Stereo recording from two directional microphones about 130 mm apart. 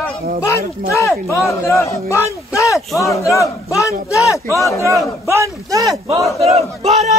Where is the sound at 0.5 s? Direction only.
20° left (ahead or behind).